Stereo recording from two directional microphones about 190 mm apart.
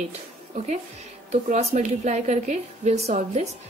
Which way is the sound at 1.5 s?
35° right (ahead or behind).